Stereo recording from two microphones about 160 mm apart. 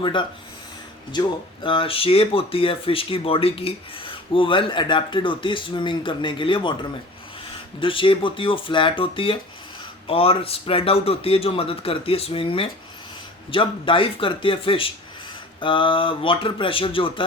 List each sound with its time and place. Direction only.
0.0 s speech: 30° left (ahead or behind)
7.8 s speech: 35° left (ahead or behind)